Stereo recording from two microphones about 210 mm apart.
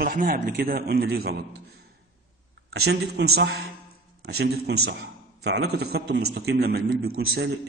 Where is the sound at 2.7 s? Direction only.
50° right (ahead or behind).